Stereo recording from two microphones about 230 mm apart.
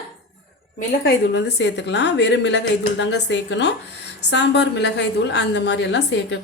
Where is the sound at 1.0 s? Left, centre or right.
Left.